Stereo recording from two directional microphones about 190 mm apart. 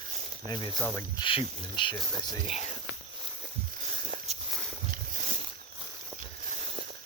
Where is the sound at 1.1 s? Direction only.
25° left (ahead or behind).